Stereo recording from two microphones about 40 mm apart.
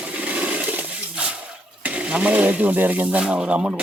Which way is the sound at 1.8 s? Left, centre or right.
Right.